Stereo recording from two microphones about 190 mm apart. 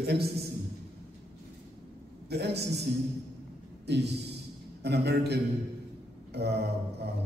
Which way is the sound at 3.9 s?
60° right (ahead or behind).